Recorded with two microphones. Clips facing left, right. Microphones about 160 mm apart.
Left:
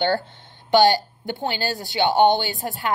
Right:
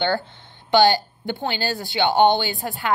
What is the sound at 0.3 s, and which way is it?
A woman's voice, 45° left (ahead or behind).